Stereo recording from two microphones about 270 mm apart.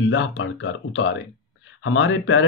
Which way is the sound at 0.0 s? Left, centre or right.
Left.